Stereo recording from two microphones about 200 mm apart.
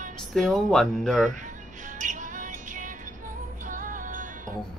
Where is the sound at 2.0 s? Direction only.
40° right (ahead or behind).